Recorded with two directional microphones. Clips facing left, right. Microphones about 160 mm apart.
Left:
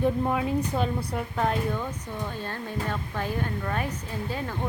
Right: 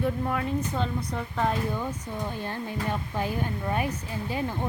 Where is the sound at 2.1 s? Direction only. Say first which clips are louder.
Even; 15° right (ahead or behind).